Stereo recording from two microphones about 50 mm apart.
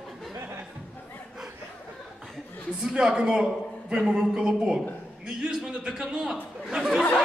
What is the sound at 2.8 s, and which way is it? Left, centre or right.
Speech, centre.